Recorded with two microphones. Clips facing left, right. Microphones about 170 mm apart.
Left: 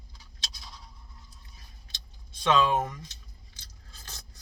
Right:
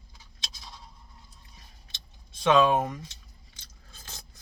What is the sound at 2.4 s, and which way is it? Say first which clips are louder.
Speech: right 3 dB; 20° right (ahead or behind).